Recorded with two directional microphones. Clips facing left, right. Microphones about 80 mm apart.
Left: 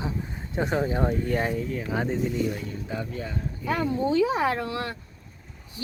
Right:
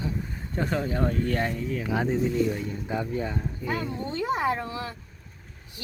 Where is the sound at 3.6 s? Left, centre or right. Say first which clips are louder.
Left 7 dB; left.